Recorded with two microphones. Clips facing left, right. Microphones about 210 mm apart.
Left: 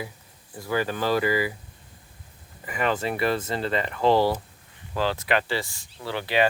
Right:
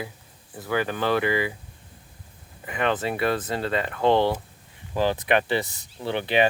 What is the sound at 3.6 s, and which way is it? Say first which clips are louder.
Speech: even; centre (ahead or behind).